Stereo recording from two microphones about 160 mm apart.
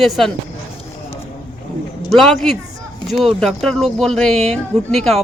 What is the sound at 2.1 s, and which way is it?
A man's voice, centre (ahead or behind).